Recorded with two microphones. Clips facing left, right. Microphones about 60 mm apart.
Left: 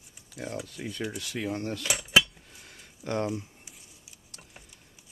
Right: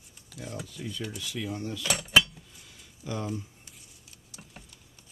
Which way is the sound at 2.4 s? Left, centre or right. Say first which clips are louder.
Left 2 dB; left.